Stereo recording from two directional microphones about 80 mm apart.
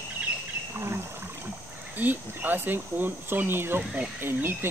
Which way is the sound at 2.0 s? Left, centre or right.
Right.